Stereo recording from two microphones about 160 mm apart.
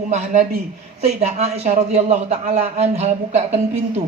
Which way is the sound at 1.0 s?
45° right (ahead or behind).